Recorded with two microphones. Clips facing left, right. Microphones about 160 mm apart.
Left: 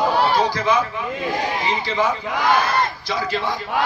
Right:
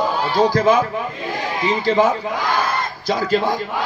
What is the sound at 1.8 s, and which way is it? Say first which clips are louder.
A man's voice: right 5 dB; 45° right (ahead or behind).